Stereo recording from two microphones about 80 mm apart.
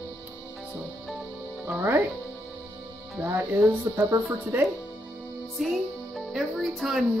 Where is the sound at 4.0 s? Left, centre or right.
Right.